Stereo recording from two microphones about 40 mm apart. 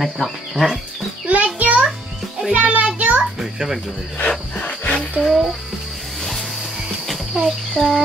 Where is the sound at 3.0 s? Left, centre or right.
Right.